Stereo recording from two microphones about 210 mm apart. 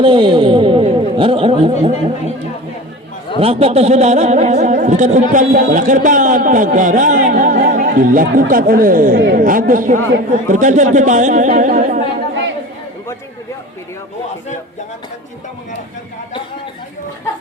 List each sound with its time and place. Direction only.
0.0 s speech: 25° right (ahead or behind)
3.4 s speech: 30° right (ahead or behind)
12.3 s chatter: 65° right (ahead or behind)